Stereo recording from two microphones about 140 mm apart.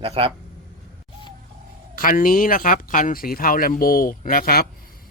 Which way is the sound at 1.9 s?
75° left (ahead or behind).